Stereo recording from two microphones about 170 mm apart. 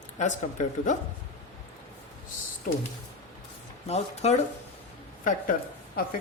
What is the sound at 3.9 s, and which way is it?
Speech, 40° left (ahead or behind).